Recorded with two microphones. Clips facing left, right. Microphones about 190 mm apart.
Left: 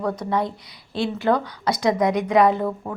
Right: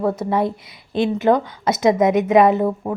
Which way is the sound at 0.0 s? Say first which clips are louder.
Right 4 dB; 25° right (ahead or behind).